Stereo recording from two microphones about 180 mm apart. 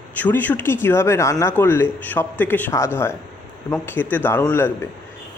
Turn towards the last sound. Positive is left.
turn(degrees=15)  # may be behind; listen again after turning